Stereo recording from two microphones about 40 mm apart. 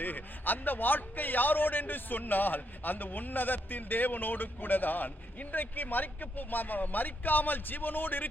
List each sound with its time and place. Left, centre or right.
0.0 s a man's voice: left